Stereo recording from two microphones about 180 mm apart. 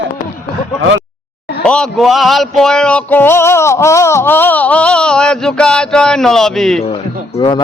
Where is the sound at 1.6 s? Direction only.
5° left (ahead or behind).